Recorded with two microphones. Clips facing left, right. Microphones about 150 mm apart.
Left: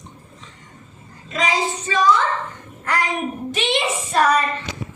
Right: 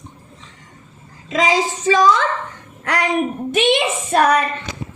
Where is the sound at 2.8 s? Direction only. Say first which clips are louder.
Right 2 dB; 70° right (ahead or behind).